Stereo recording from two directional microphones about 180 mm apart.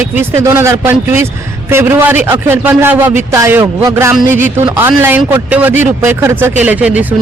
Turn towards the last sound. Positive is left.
turn(degrees=-10)  # may be behind; listen again after turning